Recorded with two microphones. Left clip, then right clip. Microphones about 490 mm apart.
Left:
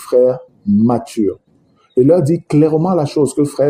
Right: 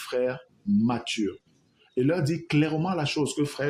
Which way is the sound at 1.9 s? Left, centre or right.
Right.